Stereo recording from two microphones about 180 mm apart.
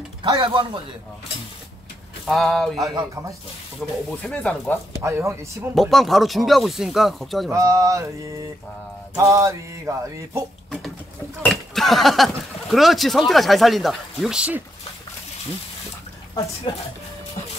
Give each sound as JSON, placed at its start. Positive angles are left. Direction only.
{"t": 0.2, "sound": "speech", "side_deg": -30}
{"t": 2.2, "sound": "speech", "side_deg": 0}
{"t": 2.8, "sound": "speech", "side_deg": -20}
{"t": 3.8, "sound": "speech", "side_deg": 5}
{"t": 4.9, "sound": "a sound", "side_deg": -15}
{"t": 5.8, "sound": "speech", "side_deg": 0}
{"t": 7.5, "sound": "a sound", "side_deg": -20}
{"t": 9.1, "sound": "a sound", "side_deg": -15}
{"t": 11.4, "sound": "speech", "side_deg": 0}